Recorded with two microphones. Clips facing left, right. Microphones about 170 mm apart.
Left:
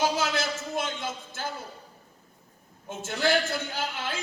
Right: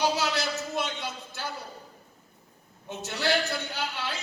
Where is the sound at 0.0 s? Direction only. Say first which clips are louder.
Even; 50° left (ahead or behind).